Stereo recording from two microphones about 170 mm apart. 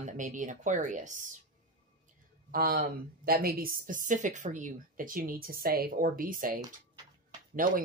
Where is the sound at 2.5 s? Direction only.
60° right (ahead or behind).